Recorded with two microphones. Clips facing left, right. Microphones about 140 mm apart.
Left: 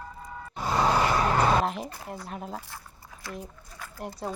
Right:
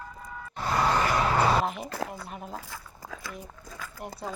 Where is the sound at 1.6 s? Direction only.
5° right (ahead or behind).